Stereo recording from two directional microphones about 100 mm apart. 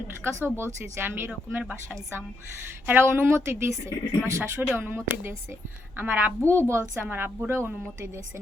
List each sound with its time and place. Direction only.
0.3 s speech: 25° right (ahead or behind)
2.8 s speech: 20° right (ahead or behind)